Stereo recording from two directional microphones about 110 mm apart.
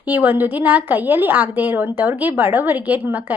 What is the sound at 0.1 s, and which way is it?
A woman's voice, 15° right (ahead or behind).